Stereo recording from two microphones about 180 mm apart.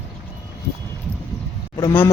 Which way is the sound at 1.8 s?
15° left (ahead or behind).